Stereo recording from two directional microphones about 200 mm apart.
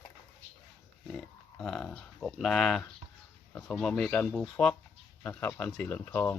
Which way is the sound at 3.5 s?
5° left (ahead or behind).